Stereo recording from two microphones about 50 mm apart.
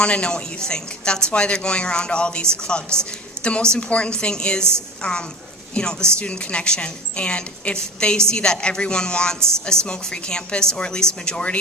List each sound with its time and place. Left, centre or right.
0.0 s a woman's voice: centre